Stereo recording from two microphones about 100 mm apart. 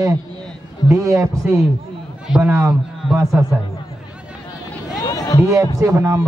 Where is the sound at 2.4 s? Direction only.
25° right (ahead or behind).